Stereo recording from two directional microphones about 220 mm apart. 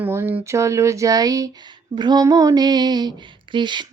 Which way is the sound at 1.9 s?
20° right (ahead or behind).